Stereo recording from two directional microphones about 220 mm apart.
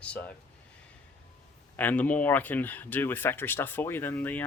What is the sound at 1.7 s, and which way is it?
Speech, 10° left (ahead or behind).